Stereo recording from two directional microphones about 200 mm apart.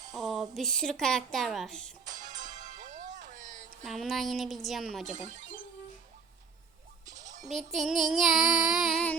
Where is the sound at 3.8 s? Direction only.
Centre (ahead or behind).